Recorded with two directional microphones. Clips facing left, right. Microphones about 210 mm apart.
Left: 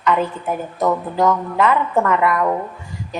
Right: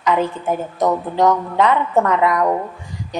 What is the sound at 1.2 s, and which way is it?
A woman's voice, 15° right (ahead or behind).